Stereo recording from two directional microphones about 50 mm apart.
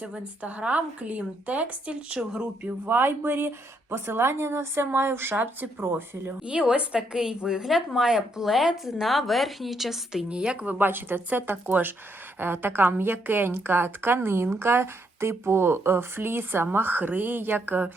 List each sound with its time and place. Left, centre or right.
0.0 s a woman's voice: right
2.9 s a woman's voice: right
6.5 s a woman's voice: right
10.2 s a woman's voice: right
10.8 s a woman's voice: right